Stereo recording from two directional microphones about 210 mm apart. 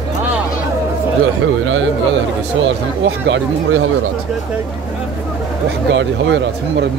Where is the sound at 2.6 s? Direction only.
60° right (ahead or behind).